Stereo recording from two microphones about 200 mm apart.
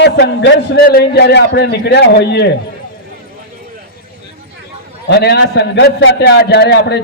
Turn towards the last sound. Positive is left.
turn(degrees=55)  # may be behind; listen again after turning